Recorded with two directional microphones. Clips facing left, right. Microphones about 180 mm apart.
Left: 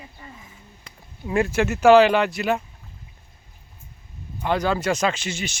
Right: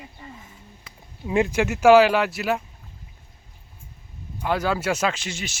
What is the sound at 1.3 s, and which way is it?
Speech, 15° right (ahead or behind).